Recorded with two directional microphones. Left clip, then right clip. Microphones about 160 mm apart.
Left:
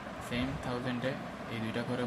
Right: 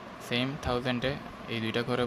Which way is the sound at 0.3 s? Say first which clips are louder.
Right 7 dB; 90° right.